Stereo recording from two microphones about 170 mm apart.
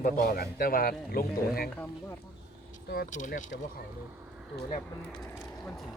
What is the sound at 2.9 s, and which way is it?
Speech, 55° left (ahead or behind).